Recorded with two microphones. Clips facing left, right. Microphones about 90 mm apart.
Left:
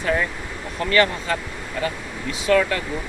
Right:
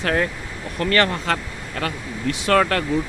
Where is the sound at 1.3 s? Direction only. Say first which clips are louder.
Right 2 dB; 80° right.